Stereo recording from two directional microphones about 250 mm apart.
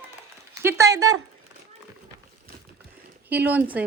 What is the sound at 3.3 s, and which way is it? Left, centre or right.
Speech, centre.